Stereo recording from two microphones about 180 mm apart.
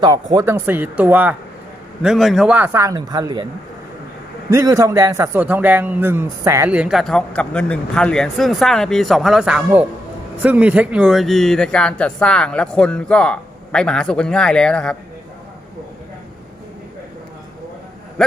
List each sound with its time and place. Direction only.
0.0 s speech: 20° right (ahead or behind)
0.5 s a man's voice: 10° right (ahead or behind)
4.5 s a man's voice: 15° right (ahead or behind); by 14.9 s 5° left (ahead or behind)